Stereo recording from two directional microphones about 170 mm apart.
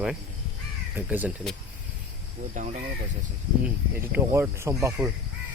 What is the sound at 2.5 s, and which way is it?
Speech, 45° right (ahead or behind).